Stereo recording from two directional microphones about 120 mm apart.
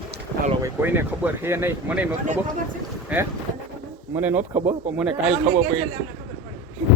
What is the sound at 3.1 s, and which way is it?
Speech, 10° right (ahead or behind).